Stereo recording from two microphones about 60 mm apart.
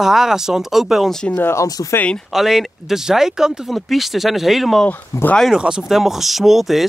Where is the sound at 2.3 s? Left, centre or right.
Centre.